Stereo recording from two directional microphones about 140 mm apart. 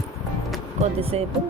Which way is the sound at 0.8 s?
45° right (ahead or behind).